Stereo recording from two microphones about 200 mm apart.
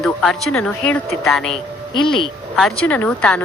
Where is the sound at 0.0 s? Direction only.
5° left (ahead or behind).